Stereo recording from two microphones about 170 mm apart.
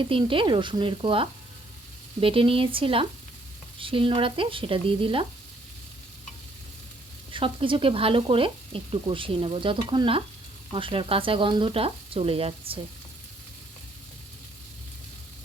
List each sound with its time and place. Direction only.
0.0 s speech: 30° right (ahead or behind)
7.3 s speech: 30° right (ahead or behind)